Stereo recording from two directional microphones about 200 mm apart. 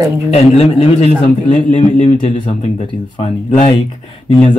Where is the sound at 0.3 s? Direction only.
30° left (ahead or behind).